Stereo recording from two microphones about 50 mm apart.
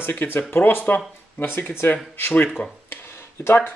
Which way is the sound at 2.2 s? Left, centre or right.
Left.